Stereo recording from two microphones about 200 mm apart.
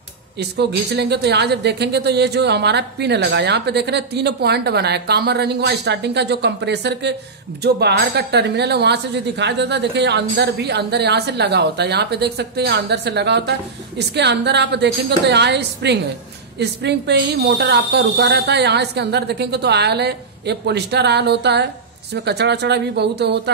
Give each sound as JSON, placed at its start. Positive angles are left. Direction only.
{"t": 0.4, "sound": "speech", "side_deg": -55}